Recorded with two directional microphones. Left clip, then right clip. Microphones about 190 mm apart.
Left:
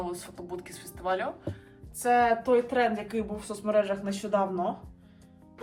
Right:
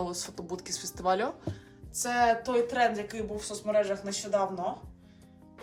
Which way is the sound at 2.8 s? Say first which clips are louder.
Even; 5° right (ahead or behind).